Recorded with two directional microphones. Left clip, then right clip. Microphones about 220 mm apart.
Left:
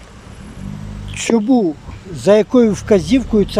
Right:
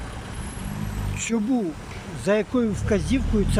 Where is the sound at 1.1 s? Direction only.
25° left (ahead or behind).